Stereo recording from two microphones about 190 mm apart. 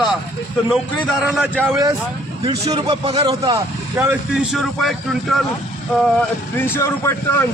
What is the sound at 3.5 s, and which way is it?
Speech, 15° right (ahead or behind).